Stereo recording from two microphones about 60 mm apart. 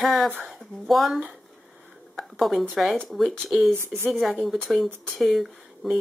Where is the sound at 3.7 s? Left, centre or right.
Right.